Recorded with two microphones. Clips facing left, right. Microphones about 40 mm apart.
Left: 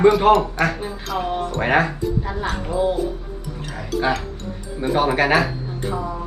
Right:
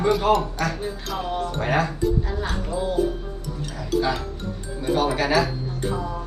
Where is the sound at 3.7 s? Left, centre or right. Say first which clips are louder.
Left 2 dB; left.